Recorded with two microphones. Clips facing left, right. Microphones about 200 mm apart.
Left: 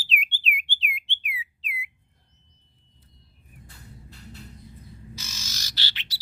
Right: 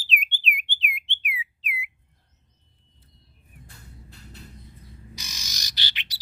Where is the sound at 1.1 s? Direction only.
15° right (ahead or behind).